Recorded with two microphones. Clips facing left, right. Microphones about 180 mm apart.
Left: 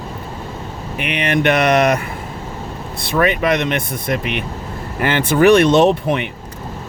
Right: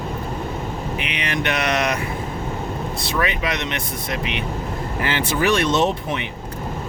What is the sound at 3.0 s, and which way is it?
Speech, 55° left (ahead or behind).